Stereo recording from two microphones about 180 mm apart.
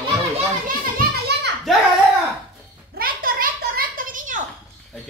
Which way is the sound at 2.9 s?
55° right (ahead or behind).